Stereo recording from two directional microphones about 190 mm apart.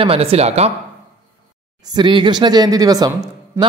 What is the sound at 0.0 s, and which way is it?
Speech, 30° right (ahead or behind).